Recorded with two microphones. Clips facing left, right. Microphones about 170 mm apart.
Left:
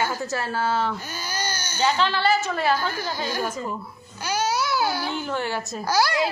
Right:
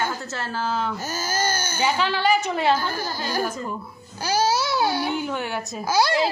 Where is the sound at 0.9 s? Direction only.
40° right (ahead or behind).